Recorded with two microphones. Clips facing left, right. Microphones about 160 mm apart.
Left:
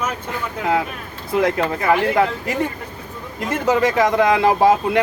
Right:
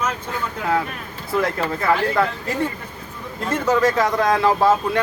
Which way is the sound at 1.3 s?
20° left (ahead or behind).